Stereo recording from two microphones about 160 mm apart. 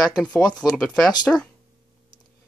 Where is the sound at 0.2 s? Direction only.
5° left (ahead or behind).